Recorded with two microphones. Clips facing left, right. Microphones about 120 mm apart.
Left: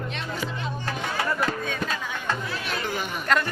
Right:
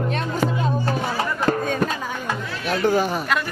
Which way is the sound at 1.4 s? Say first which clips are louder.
Right 7 dB; 45° right (ahead or behind).